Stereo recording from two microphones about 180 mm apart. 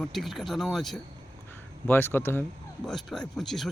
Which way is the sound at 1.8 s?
10° left (ahead or behind).